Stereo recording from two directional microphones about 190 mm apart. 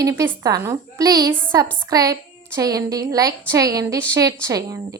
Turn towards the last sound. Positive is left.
turn(degrees=-20)  # may be behind; listen again after turning